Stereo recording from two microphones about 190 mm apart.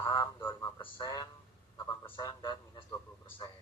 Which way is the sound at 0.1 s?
20° left (ahead or behind).